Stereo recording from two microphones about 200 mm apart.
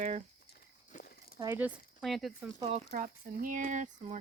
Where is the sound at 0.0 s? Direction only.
35° right (ahead or behind).